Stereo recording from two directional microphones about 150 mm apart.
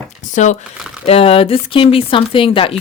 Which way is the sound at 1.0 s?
40° left (ahead or behind).